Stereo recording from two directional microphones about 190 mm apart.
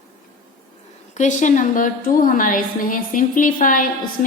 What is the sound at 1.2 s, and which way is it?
A woman's voice, 40° left (ahead or behind).